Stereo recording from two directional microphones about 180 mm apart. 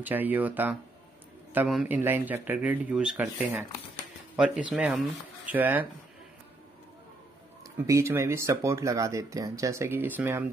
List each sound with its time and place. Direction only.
0.0 s speech: 10° right (ahead or behind)
7.8 s speech: 15° right (ahead or behind)